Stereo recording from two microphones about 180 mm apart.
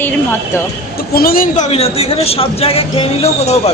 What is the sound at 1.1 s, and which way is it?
A woman's voice, 55° left (ahead or behind).